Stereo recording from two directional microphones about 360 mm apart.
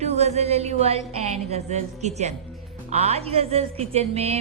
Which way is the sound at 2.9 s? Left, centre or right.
Centre.